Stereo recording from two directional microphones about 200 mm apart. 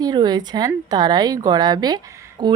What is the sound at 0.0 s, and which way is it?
A woman's voice, 20° right (ahead or behind).